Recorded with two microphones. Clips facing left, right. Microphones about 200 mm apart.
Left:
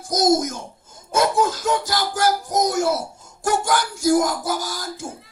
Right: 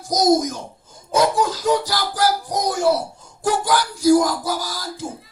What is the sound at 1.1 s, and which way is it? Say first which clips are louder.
Music: right 1 dB; 50° left (ahead or behind).